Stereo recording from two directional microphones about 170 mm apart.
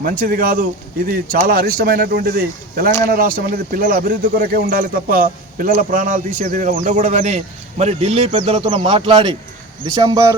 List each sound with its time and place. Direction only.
0.0 s speech: 55° right (ahead or behind); by 10.3 s 20° right (ahead or behind)